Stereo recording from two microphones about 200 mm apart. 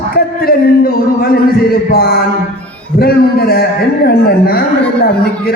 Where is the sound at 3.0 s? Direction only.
50° left (ahead or behind).